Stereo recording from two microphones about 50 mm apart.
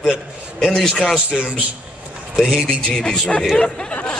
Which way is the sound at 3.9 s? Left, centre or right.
Left.